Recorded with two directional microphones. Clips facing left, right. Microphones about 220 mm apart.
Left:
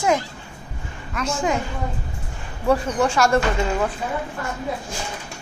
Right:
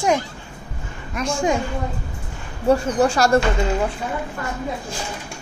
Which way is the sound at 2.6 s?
30° right (ahead or behind).